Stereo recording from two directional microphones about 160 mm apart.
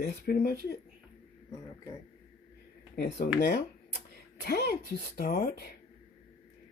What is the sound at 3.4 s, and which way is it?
Speech, 90° left.